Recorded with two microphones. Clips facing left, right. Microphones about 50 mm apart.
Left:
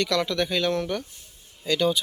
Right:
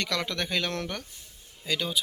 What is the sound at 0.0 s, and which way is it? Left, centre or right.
Speech, right.